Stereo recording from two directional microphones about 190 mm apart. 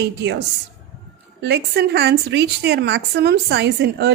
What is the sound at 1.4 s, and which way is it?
Speech, 60° right (ahead or behind).